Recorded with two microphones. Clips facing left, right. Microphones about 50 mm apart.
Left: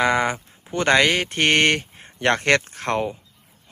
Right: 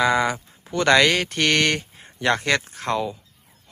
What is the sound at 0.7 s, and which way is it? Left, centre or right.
Speech, left.